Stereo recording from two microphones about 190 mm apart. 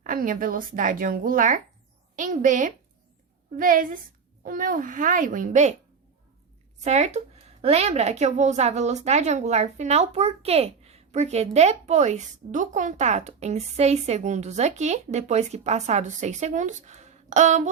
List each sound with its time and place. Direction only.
0.0 s a woman's voice: 45° right (ahead or behind)
6.8 s a woman's voice: 35° right (ahead or behind)